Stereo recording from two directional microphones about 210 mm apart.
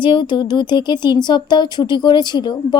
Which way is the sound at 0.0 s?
25° left (ahead or behind).